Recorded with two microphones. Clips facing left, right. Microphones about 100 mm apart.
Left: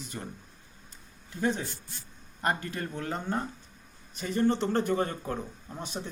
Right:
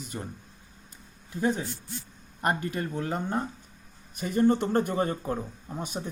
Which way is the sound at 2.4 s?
15° right (ahead or behind).